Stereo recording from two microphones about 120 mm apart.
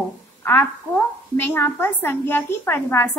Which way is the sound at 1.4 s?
20° left (ahead or behind).